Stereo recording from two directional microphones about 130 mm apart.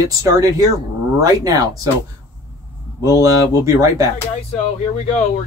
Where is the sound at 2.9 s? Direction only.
25° right (ahead or behind).